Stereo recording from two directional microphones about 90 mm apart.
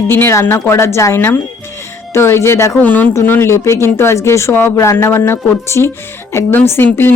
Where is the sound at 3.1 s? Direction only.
30° left (ahead or behind).